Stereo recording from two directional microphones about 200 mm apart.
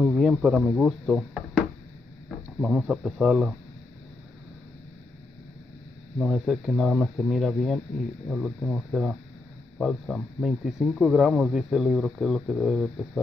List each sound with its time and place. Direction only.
0.0 s speech: centre (ahead or behind)
2.6 s speech: centre (ahead or behind)
6.1 s speech: centre (ahead or behind)